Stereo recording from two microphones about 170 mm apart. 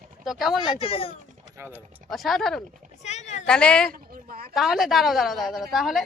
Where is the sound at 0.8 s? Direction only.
35° left (ahead or behind).